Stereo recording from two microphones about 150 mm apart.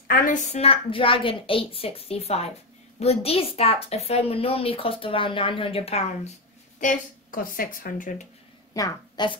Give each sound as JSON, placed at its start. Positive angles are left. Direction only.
{"t": 0.1, "sound": "a woman's voice", "side_deg": 60}
{"t": 6.8, "sound": "speech", "side_deg": 60}
{"t": 8.7, "sound": "a woman's voice", "side_deg": 25}